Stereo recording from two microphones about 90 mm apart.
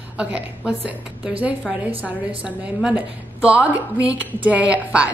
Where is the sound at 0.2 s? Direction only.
15° right (ahead or behind).